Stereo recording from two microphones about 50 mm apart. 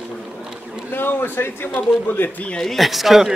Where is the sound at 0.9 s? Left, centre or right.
Left.